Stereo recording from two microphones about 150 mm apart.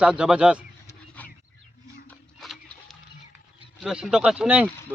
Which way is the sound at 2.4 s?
Centre (ahead or behind).